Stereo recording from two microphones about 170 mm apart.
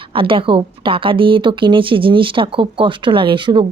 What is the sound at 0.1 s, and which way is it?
Speech, 30° right (ahead or behind).